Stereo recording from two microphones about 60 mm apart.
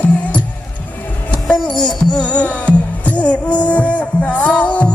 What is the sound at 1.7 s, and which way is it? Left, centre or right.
Music, centre.